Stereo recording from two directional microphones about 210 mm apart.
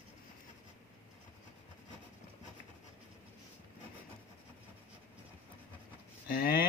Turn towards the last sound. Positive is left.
turn(degrees=45)  # may be behind; listen again after turning